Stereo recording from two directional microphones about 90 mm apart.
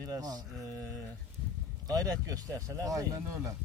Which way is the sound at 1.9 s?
40° right (ahead or behind).